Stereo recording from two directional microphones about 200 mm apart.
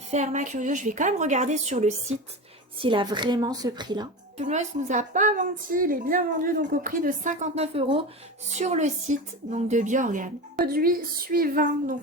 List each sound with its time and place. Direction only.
0.1 s a woman's voice: 35° right (ahead or behind)
2.8 s a woman's voice: 25° right (ahead or behind)
4.4 s a woman's voice: 35° right (ahead or behind)